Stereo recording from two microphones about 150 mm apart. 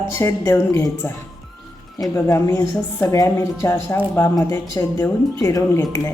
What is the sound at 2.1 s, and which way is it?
A woman's voice, 15° left (ahead or behind).